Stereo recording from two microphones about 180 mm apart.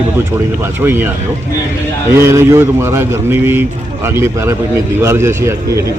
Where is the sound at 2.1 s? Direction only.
15° right (ahead or behind).